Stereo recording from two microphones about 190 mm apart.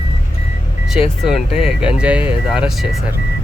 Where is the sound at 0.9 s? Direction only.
5° right (ahead or behind).